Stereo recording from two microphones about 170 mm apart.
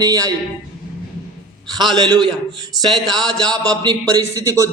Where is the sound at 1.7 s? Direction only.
25° right (ahead or behind).